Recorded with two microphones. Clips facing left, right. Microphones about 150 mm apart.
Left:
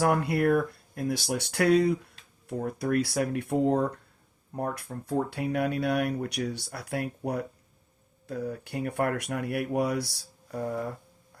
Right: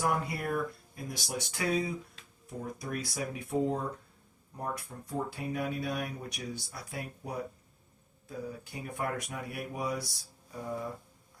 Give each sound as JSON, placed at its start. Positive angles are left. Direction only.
{"t": 0.0, "sound": "speech", "side_deg": 65}